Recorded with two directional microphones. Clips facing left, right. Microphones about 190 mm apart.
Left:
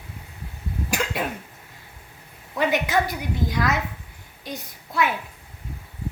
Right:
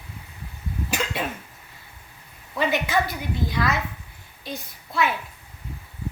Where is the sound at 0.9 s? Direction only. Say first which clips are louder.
Left 1 dB; 15° left (ahead or behind).